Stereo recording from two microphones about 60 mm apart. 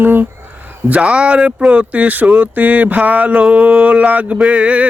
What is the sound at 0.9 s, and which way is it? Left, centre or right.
Speech, centre.